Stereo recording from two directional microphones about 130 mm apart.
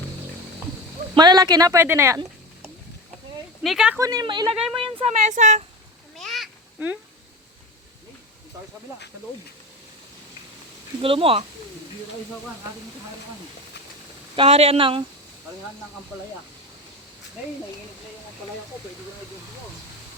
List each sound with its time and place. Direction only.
1.1 s speech: 35° right (ahead or behind)
3.6 s speech: 5° right (ahead or behind)
3.9 s speech: 25° right (ahead or behind)
4.3 s speech: 40° right (ahead or behind)
5.0 s speech: 60° right (ahead or behind)
6.1 s a sound: centre (ahead or behind)
6.7 s speech: 15° right (ahead or behind)
11.0 s speech: 45° right (ahead or behind)
14.3 s speech: 50° right (ahead or behind)